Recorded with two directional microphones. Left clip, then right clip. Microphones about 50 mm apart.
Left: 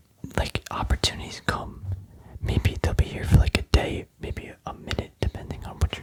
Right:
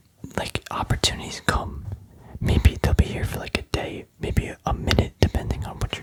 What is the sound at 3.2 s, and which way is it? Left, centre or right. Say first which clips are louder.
Whispering: left 1 dB; centre.